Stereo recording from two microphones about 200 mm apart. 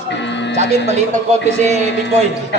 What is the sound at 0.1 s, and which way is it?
Music, 65° left (ahead or behind).